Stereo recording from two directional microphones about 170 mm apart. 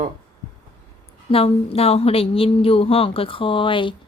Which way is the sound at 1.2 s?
35° left (ahead or behind).